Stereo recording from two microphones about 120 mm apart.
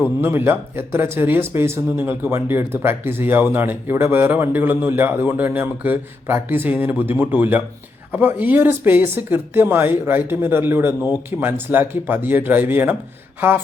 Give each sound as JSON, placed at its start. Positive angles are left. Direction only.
{"t": 0.2, "sound": "speech", "side_deg": -20}